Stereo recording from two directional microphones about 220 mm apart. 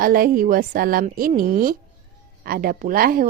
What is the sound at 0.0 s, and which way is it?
A woman's voice, 40° right (ahead or behind).